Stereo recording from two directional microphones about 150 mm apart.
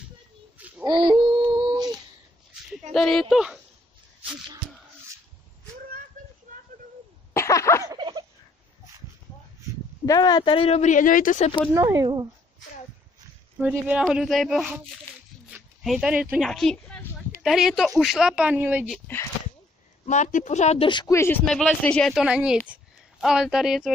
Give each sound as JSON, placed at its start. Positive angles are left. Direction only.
{"t": 0.8, "sound": "a sound", "side_deg": -35}
{"t": 2.9, "sound": "a woman's voice", "side_deg": 5}
{"t": 6.2, "sound": "a sound", "side_deg": -60}
{"t": 7.3, "sound": "a sound", "side_deg": 20}
{"t": 7.8, "sound": "turkey", "side_deg": -25}
{"t": 10.0, "sound": "speech", "side_deg": 25}
{"t": 11.7, "sound": "speech", "side_deg": -25}
{"t": 13.6, "sound": "a woman's voice", "side_deg": -10}
{"t": 19.1, "sound": "speech", "side_deg": 15}
{"t": 20.1, "sound": "speech", "side_deg": 55}
{"t": 21.1, "sound": "speech", "side_deg": 15}
{"t": 21.5, "sound": "a woman's voice", "side_deg": 5}
{"t": 22.2, "sound": "a woman's voice", "side_deg": -5}